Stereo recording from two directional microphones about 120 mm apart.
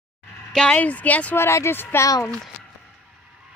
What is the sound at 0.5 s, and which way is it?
Speech, 5° left (ahead or behind).